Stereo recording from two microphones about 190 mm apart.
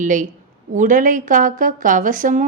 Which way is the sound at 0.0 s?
40° right (ahead or behind).